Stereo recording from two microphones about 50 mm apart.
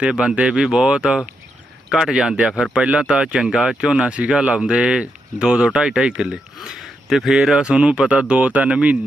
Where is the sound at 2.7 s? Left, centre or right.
Right.